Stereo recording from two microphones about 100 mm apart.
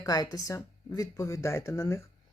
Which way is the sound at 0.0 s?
40° left (ahead or behind).